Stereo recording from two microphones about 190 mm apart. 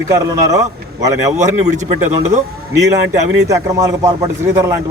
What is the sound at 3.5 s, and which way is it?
A man's voice, 15° right (ahead or behind).